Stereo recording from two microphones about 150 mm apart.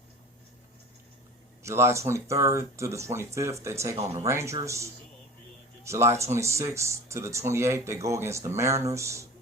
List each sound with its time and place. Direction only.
1.6 s speech: 20° right (ahead or behind)